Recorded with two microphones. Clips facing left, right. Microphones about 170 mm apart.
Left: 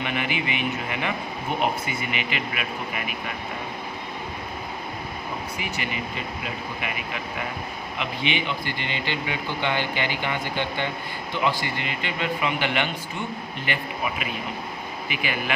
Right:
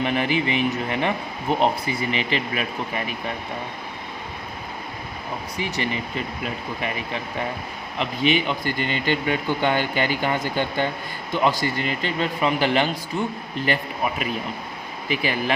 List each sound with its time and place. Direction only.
0.0 s speech: 35° right (ahead or behind)
5.5 s speech: 35° right (ahead or behind)
7.9 s speech: 40° right (ahead or behind)